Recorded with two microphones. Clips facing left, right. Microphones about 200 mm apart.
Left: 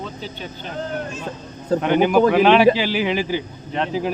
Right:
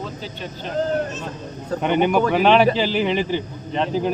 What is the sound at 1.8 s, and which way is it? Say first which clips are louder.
A man's voice: left 2 dB; centre (ahead or behind).